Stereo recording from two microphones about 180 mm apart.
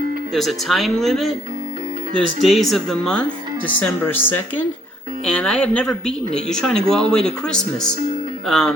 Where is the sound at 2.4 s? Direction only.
Centre (ahead or behind).